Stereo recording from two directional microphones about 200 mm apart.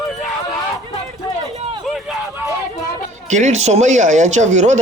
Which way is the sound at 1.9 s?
5° right (ahead or behind).